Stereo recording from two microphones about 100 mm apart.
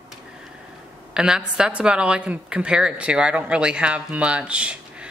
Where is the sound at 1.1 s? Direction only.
5° right (ahead or behind).